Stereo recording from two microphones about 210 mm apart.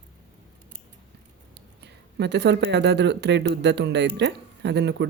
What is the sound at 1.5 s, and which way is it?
Speech, 55° right (ahead or behind).